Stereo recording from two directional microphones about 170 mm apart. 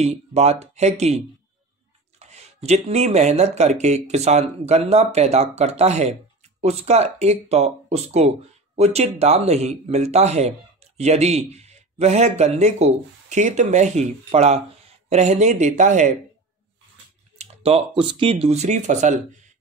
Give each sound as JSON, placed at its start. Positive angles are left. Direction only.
{"t": 0.0, "sound": "speech", "side_deg": -40}
{"t": 17.4, "sound": "speech", "side_deg": -35}